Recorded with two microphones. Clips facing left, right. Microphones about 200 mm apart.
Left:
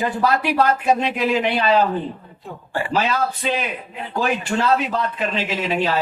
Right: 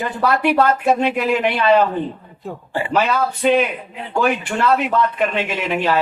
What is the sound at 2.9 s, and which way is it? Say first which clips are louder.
Speech: right 3 dB; 60° right (ahead or behind).